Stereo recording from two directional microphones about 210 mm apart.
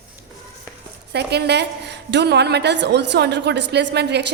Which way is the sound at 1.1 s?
50° right (ahead or behind).